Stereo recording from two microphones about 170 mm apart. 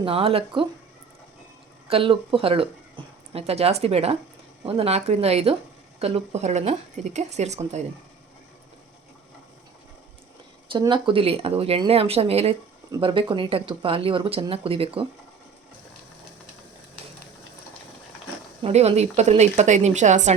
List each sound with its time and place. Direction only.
0.0 s speech: 35° right (ahead or behind)
1.9 s speech: 30° right (ahead or behind)
10.7 s speech: 30° right (ahead or behind)
18.6 s speech: 40° right (ahead or behind)